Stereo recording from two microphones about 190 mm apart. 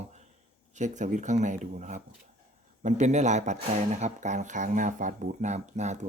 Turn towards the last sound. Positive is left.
turn(degrees=-35)  # may be behind; listen again after turning